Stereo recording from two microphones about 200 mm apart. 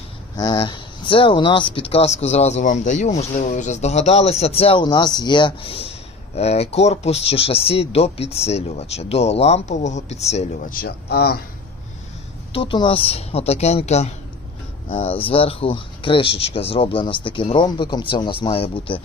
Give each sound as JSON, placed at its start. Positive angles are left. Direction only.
{"t": 0.3, "sound": "speech", "side_deg": 20}
{"t": 12.5, "sound": "speech", "side_deg": 25}